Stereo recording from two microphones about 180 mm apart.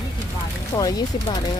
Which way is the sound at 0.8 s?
20° left (ahead or behind).